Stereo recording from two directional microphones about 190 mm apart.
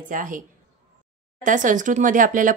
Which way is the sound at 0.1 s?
45° right (ahead or behind).